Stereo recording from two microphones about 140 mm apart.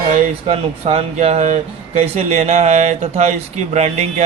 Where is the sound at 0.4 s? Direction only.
45° right (ahead or behind).